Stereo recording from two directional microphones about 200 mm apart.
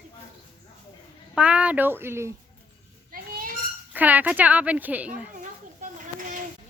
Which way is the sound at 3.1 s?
45° right (ahead or behind).